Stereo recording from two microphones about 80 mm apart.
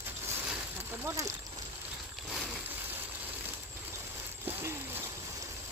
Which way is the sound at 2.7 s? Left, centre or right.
Right.